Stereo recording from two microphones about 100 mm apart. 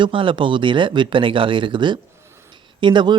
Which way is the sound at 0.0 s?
60° right (ahead or behind).